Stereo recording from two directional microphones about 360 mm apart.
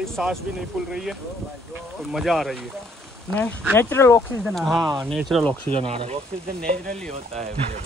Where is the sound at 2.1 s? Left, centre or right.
Centre.